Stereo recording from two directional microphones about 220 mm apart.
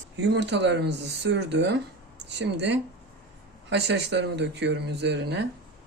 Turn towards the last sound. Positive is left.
turn(degrees=-50)  # may be behind; listen again after turning